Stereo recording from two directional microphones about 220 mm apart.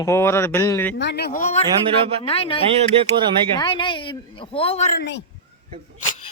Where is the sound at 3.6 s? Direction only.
20° left (ahead or behind).